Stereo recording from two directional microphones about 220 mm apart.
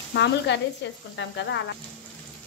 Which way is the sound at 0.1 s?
50° left (ahead or behind).